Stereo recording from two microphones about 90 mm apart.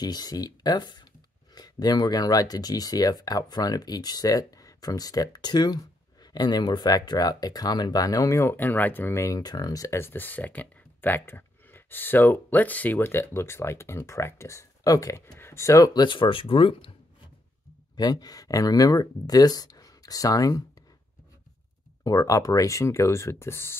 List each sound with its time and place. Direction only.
0.0 s speech: 50° left (ahead or behind)
8.5 s speech: 20° left (ahead or behind)
9.2 s speech: 45° left (ahead or behind)
15.3 s speech: 30° left (ahead or behind)
15.9 s speech: 60° left (ahead or behind); by 16.9 s 80° left
17.9 s speech: 50° left (ahead or behind)
22.0 s speech: 40° left (ahead or behind)